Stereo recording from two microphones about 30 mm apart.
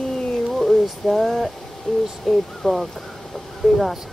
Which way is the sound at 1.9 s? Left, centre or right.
Left.